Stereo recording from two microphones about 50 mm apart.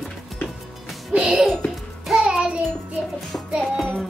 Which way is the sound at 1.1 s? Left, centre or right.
Centre.